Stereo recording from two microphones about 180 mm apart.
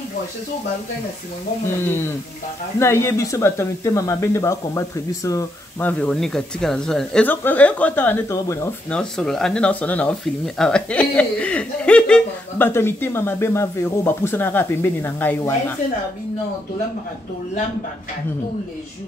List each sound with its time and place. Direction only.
1.9 s speech: 10° left (ahead or behind)
8.9 s speech: 5° left (ahead or behind)